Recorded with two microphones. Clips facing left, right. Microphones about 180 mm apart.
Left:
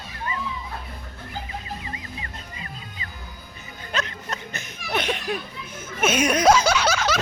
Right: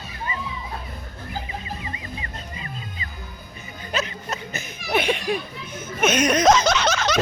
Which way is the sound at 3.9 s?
5° right (ahead or behind).